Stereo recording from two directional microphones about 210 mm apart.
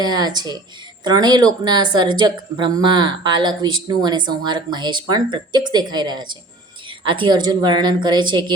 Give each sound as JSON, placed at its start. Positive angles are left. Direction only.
{"t": 0.0, "sound": "speech", "side_deg": -20}